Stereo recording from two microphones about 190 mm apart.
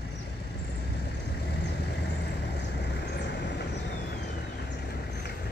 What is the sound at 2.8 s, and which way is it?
Vehicle, 65° left (ahead or behind).